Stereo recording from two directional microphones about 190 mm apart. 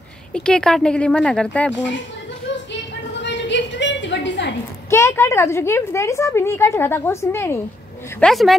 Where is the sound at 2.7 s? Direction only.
70° left (ahead or behind).